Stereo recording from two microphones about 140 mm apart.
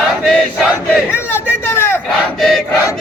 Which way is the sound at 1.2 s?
15° left (ahead or behind).